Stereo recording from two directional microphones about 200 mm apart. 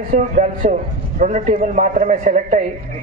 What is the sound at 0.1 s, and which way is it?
A man's voice, 40° right (ahead or behind).